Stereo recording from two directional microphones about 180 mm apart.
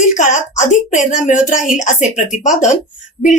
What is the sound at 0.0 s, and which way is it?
A woman's voice, 45° left (ahead or behind).